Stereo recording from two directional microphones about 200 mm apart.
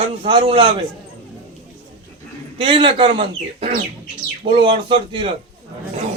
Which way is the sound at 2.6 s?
25° right (ahead or behind).